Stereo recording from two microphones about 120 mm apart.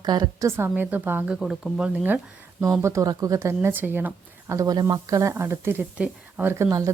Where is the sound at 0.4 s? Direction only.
20° right (ahead or behind).